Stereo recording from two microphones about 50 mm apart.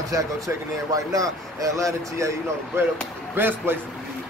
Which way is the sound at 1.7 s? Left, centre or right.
Right.